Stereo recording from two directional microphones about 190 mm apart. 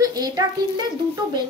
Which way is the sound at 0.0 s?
20° right (ahead or behind).